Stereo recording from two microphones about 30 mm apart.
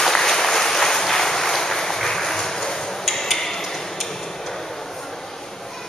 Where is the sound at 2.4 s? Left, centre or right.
Centre.